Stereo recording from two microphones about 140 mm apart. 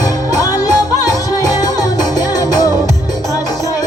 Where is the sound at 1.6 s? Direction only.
25° left (ahead or behind).